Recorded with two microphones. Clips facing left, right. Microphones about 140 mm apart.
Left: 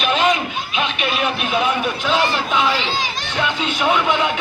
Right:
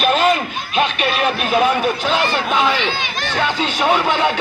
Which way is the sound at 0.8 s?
45° right (ahead or behind).